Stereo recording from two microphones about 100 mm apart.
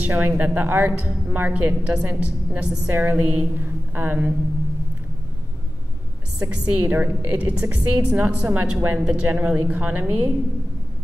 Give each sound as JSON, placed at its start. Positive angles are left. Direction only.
{"t": 0.0, "sound": "a woman's voice", "side_deg": -20}
{"t": 6.5, "sound": "a woman's voice", "side_deg": -15}